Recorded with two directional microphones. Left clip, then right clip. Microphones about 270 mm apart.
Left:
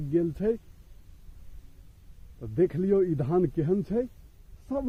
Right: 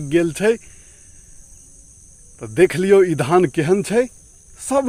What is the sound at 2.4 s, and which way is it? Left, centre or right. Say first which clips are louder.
Speech: right 11 dB; centre.